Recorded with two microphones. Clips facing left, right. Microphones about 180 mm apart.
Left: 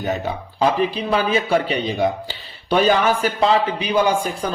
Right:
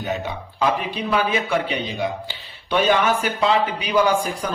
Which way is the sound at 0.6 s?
30° left (ahead or behind).